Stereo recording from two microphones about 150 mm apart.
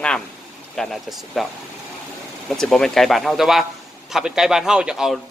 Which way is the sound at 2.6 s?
5° left (ahead or behind).